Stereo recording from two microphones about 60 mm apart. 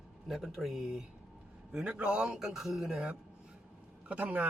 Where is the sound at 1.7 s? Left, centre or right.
Right.